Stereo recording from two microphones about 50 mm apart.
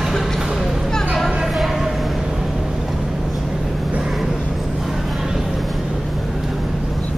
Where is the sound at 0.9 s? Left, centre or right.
Centre.